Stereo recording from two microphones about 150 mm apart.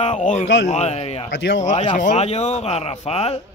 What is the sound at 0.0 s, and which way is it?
Speech, 55° left (ahead or behind).